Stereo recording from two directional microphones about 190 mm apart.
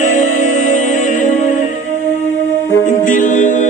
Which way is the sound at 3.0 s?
45° left (ahead or behind).